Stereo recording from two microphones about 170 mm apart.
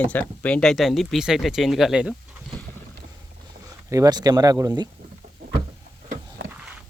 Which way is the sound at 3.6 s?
20° right (ahead or behind).